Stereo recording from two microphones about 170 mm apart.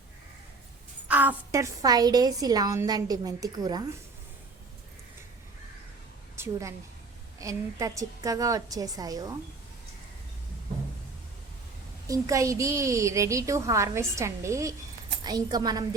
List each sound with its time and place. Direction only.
1.0 s a woman's voice: 10° right (ahead or behind)
6.3 s a woman's voice: 15° right (ahead or behind)
12.0 s a woman's voice: 20° right (ahead or behind)